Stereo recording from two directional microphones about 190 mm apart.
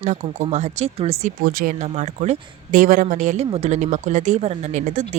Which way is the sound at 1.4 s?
50° right (ahead or behind).